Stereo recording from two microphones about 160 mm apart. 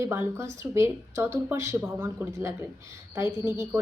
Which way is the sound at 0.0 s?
15° right (ahead or behind).